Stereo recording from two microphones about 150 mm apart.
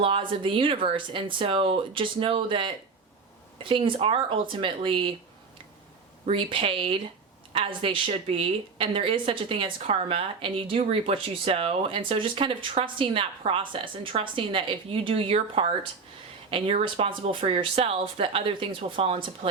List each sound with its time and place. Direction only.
0.0 s a woman's voice: 35° right (ahead or behind)
6.2 s a woman's voice: 35° right (ahead or behind)